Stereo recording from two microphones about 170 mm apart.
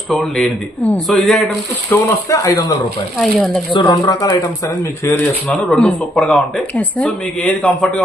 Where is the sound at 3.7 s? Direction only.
25° left (ahead or behind).